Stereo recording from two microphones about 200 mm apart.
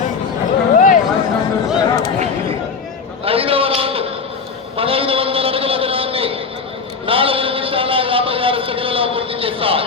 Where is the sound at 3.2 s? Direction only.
30° right (ahead or behind).